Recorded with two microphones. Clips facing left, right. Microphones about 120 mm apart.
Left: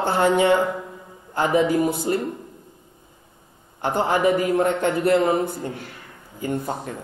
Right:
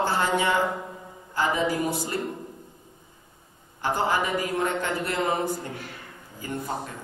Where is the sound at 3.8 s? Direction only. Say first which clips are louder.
Left 5 dB; 55° left (ahead or behind).